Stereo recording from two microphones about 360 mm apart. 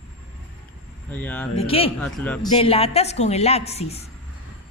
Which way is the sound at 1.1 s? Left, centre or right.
Centre.